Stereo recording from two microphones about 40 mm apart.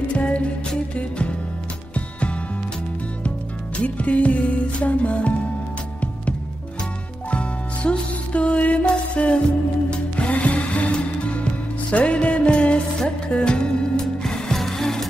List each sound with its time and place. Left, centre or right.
0.1 s music: left
7.2 s music: left
14.2 s music: centre